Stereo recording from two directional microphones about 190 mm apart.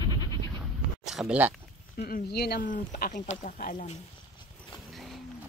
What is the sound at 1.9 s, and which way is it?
Speech, 55° left (ahead or behind).